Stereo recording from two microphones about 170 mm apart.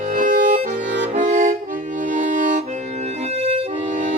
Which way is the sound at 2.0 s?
50° right (ahead or behind).